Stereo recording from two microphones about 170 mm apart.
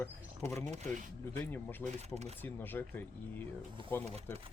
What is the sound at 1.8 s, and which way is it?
Speech, 40° right (ahead or behind).